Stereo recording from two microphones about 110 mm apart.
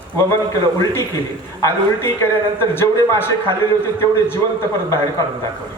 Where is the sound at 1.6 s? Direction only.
25° left (ahead or behind).